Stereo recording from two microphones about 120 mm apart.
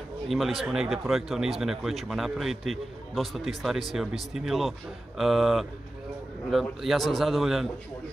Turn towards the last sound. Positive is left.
turn(degrees=0)  # may be behind; listen again after turning